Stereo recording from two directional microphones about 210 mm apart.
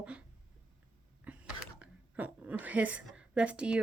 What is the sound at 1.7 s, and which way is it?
A woman's voice, 5° right (ahead or behind).